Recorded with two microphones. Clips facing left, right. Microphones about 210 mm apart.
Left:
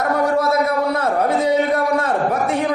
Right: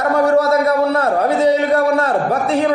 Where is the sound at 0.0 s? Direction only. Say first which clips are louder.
Right 4 dB; 70° right (ahead or behind).